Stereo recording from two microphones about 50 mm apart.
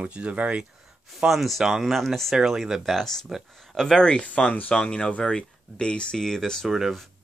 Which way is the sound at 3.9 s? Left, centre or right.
Centre.